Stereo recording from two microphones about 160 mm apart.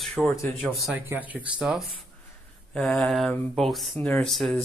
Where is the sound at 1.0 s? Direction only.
10° right (ahead or behind).